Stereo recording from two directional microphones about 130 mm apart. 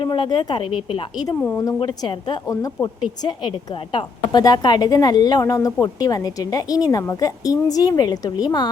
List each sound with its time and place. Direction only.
0.0 s a woman's voice: 40° left (ahead or behind)